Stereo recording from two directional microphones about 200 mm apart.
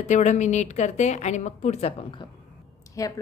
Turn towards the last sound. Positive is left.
turn(degrees=15)  # may be behind; listen again after turning